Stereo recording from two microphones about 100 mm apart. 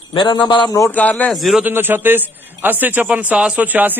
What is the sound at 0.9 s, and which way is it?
Speech, 15° left (ahead or behind).